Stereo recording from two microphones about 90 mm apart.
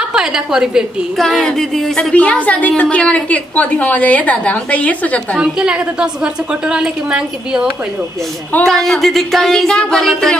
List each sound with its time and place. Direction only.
0.1 s a woman's voice: 5° right (ahead or behind)
1.1 s speech: 5° left (ahead or behind)
2.1 s a woman's voice: 15° left (ahead or behind)
5.4 s a woman's voice: 10° right (ahead or behind)
8.6 s speech: 5° left (ahead or behind)